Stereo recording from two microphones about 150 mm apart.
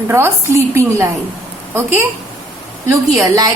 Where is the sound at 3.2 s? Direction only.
20° right (ahead or behind).